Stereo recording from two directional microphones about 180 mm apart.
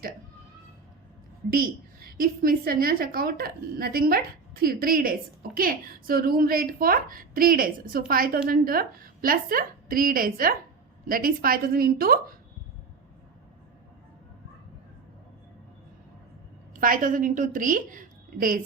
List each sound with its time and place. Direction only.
1.5 s a woman's voice: 55° right (ahead or behind)
16.7 s a woman's voice: 50° right (ahead or behind)